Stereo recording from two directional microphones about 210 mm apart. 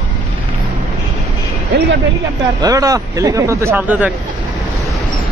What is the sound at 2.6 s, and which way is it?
Speech, 15° right (ahead or behind).